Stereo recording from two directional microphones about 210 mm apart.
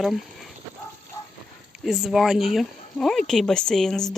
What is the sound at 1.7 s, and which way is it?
Speech, centre (ahead or behind).